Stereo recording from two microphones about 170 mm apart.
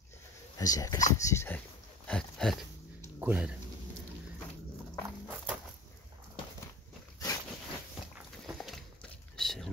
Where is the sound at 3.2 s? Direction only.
10° right (ahead or behind).